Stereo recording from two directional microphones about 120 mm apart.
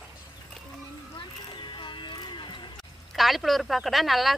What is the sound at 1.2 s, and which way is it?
Music, 40° left (ahead or behind).